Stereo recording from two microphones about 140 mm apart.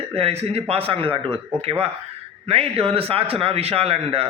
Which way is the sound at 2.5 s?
45° right (ahead or behind).